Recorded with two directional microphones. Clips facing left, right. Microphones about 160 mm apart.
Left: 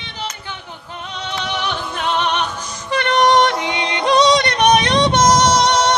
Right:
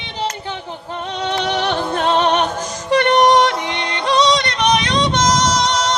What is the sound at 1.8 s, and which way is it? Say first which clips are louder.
Music: right 5 dB; 45° right (ahead or behind).